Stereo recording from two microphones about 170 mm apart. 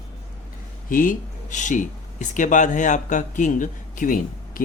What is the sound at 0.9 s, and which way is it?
Speech, 50° left (ahead or behind).